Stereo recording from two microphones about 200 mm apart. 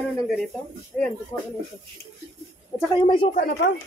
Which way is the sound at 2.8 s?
20° left (ahead or behind).